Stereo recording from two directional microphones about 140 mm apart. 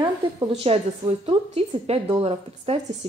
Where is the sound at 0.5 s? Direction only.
45° right (ahead or behind).